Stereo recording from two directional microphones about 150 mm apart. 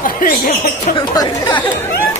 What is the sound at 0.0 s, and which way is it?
Speech, 60° left (ahead or behind).